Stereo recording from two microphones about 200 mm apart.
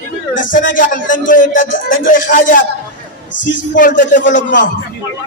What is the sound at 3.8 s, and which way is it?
Speech, 40° left (ahead or behind).